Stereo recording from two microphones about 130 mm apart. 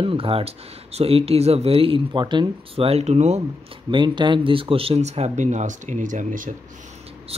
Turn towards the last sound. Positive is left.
turn(degrees=-50)  # may be behind; listen again after turning